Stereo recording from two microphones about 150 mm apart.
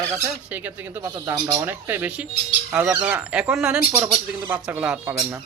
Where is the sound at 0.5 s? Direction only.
10° right (ahead or behind).